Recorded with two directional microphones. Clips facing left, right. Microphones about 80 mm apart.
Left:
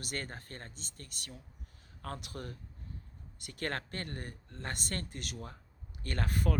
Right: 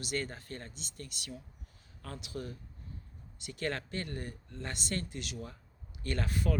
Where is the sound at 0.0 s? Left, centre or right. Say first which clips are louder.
Right 4 dB; left.